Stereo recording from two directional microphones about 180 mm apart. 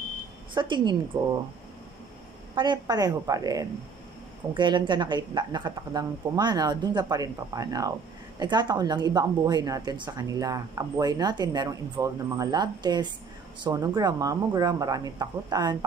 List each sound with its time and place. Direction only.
0.6 s a woman's voice: 25° right (ahead or behind)
2.5 s a woman's voice: 25° right (ahead or behind)